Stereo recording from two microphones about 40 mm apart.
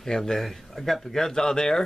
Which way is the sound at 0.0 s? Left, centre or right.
Centre.